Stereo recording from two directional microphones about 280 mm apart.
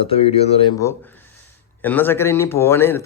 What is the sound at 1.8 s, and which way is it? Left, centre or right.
A man's voice, centre.